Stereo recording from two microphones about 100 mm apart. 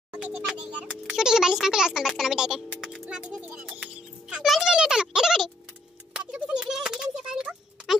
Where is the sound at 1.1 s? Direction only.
5° right (ahead or behind).